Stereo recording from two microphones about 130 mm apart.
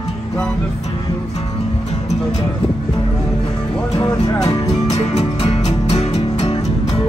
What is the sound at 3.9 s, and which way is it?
Music, 25° left (ahead or behind).